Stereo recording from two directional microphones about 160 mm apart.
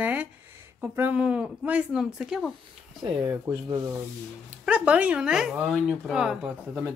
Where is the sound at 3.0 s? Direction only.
20° right (ahead or behind).